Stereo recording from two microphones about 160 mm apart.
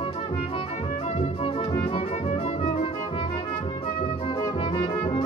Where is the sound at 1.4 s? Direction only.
35° left (ahead or behind).